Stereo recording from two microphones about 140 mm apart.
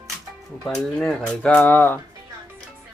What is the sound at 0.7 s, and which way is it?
Speech, 5° left (ahead or behind).